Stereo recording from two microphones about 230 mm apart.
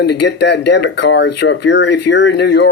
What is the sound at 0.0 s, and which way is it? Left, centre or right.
Speech, left.